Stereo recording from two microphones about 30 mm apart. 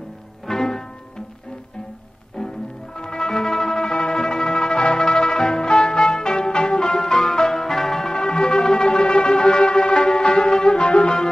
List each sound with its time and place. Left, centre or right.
0.5 s music: centre
3.0 s music: left